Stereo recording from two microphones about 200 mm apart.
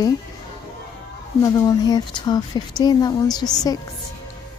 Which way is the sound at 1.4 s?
15° left (ahead or behind).